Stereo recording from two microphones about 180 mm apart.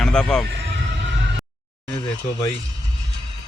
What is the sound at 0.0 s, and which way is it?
Speech, 5° left (ahead or behind).